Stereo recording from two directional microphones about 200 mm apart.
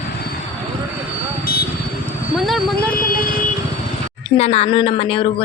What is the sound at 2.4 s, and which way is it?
Vehicle, centre (ahead or behind).